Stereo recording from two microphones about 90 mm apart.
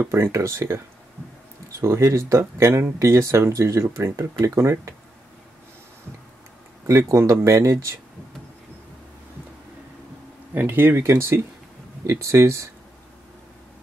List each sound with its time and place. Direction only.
0.1 s speech: 30° right (ahead or behind)
6.9 s speech: 35° right (ahead or behind)
10.5 s speech: 20° right (ahead or behind)